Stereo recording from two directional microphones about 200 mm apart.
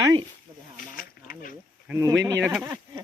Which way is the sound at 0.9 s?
45° left (ahead or behind).